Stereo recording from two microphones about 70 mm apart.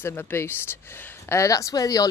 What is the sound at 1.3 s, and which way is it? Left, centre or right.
Speech, left.